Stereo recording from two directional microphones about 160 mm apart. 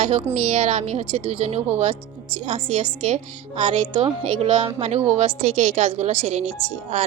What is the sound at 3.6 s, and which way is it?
A woman's voice, 30° right (ahead or behind).